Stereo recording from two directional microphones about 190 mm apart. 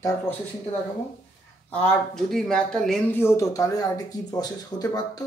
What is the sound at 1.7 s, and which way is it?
Speech, 5° left (ahead or behind).